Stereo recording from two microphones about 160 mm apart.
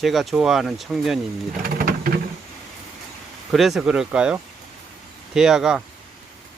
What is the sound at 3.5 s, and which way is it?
Speech, centre (ahead or behind).